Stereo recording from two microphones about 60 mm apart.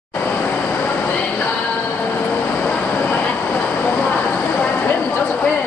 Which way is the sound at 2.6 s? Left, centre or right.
Left.